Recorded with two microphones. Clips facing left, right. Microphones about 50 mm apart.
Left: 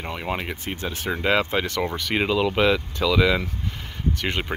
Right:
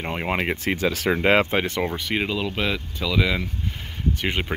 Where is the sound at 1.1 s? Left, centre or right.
Right.